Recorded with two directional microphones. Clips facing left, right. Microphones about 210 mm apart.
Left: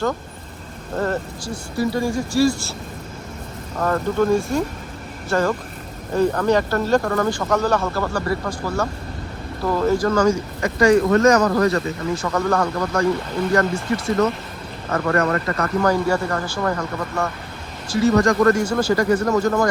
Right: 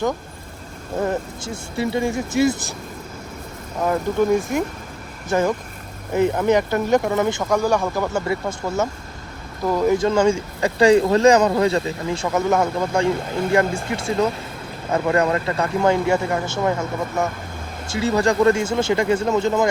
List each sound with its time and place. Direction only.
1.5 s speech: 25° right (ahead or behind)
3.8 s speech: 10° right (ahead or behind)
14.9 s speech: 15° right (ahead or behind)